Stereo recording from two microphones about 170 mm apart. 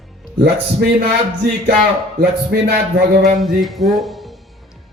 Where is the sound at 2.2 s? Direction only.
60° right (ahead or behind).